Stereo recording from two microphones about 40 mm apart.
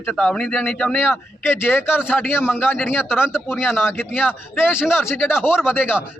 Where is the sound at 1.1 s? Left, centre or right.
Left.